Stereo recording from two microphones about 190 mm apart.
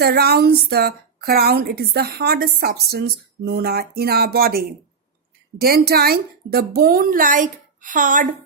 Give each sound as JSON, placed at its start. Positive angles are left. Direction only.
{"t": 0.0, "sound": "a woman's voice", "side_deg": -55}